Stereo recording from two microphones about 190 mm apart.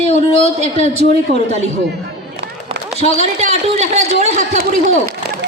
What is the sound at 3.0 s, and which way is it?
Speech, 35° left (ahead or behind).